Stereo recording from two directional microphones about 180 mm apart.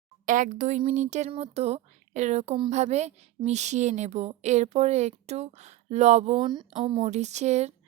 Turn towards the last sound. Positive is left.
turn(degrees=-40)  # may be behind; listen again after turning